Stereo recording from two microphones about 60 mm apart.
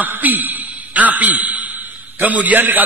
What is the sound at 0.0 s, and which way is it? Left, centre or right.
A man's voice, right.